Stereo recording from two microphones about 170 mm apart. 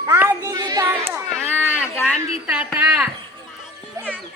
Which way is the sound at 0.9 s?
15° right (ahead or behind).